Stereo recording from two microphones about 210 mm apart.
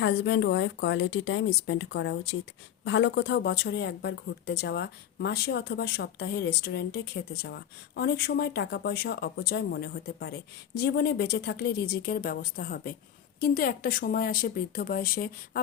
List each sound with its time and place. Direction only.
0.0 s speech: 60° left (ahead or behind)